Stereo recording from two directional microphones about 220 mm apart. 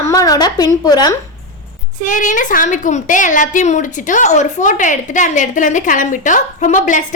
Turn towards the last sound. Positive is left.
turn(degrees=35)  # may be behind; listen again after turning